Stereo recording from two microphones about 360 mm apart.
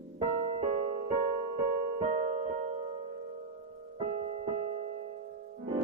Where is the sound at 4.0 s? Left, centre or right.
Centre.